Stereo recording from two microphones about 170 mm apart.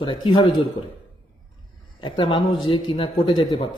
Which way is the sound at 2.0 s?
30° left (ahead or behind).